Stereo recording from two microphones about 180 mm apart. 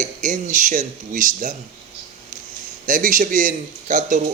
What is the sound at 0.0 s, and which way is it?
Speech, 45° right (ahead or behind).